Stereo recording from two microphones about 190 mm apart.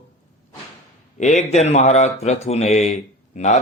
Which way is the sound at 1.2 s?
40° left (ahead or behind).